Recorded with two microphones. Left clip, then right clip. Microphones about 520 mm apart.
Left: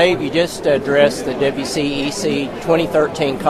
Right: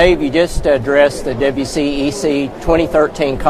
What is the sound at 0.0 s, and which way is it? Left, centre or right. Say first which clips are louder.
Speech: right 3 dB; centre.